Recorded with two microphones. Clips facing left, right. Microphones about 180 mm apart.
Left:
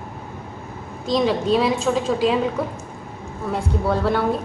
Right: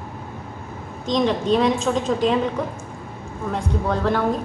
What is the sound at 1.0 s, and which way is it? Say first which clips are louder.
A woman's voice: left 1 dB; 5° left (ahead or behind).